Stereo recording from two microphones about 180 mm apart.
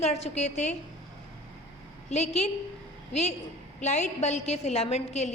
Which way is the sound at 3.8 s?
40° left (ahead or behind).